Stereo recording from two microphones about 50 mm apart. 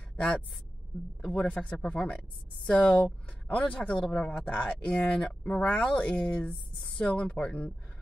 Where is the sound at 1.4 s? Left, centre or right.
Left.